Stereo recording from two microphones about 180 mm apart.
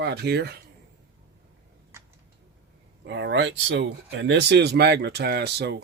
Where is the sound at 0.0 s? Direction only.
65° right (ahead or behind).